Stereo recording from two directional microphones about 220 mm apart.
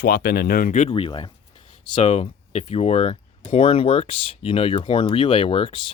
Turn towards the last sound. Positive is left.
turn(degrees=25)  # may be behind; listen again after turning